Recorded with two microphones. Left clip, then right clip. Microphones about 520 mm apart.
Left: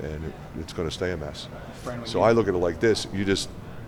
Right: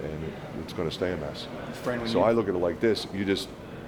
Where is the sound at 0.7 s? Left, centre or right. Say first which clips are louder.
Left 1 dB; left.